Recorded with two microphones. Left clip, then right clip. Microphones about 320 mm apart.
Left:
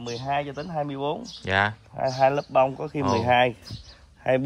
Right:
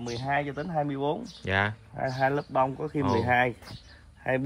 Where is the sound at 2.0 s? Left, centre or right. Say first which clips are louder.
Left 6 dB; left.